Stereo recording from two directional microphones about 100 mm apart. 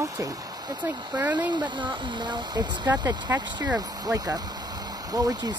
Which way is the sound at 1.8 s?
45° right (ahead or behind).